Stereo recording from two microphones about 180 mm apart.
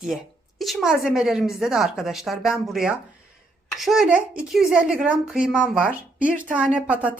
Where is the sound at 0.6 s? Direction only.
Centre (ahead or behind).